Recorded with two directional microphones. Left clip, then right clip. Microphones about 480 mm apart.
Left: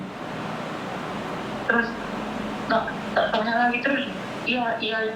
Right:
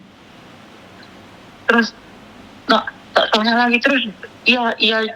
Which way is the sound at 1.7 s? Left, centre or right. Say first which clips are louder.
Right 7 dB; right.